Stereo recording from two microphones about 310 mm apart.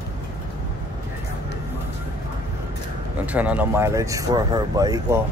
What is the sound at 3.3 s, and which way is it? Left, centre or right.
Speech, centre.